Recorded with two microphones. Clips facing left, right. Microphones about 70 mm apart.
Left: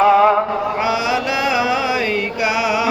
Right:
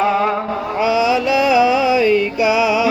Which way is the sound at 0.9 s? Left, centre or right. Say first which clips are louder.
Right 8 dB; left.